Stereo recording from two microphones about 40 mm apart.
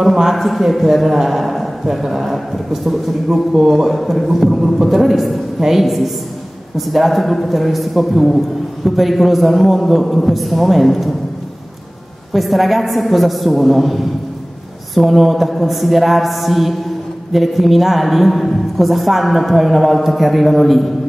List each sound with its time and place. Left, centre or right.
0.0 s a woman's voice: centre
12.3 s a woman's voice: centre